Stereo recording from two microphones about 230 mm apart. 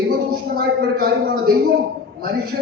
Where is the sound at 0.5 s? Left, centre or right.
Right.